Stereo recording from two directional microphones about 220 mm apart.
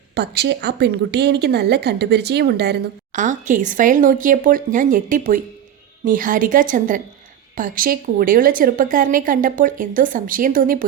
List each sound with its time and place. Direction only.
0.1 s a woman's voice: 50° right (ahead or behind)